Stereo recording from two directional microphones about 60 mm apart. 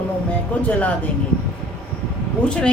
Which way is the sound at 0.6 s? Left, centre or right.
Left.